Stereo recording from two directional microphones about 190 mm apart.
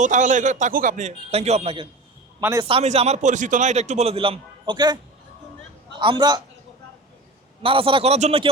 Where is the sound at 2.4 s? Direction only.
10° right (ahead or behind).